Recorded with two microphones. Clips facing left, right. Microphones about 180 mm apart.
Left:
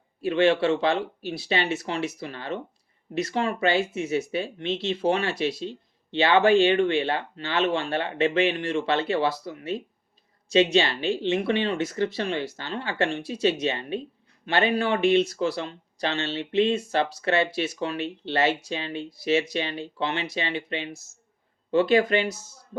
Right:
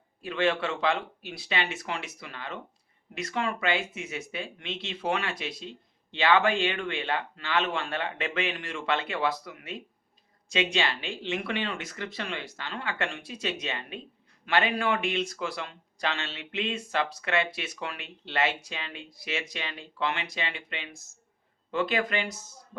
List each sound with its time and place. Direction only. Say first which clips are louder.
0.3 s speech: left 7 dB; 30° left (ahead or behind)